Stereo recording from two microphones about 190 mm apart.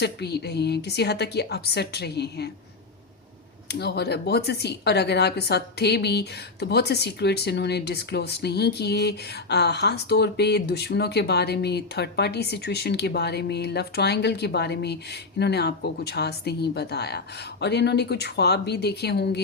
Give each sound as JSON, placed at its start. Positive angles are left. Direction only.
{"t": 0.0, "sound": "speech", "side_deg": 60}
{"t": 3.7, "sound": "speech", "side_deg": 60}